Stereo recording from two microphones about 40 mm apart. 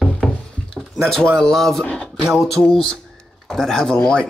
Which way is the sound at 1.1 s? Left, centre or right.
Centre.